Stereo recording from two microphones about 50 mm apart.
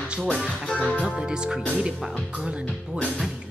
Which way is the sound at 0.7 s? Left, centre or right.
Left.